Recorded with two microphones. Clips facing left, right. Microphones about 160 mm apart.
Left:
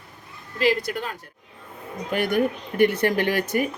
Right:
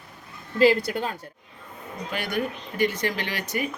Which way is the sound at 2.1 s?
55° left (ahead or behind).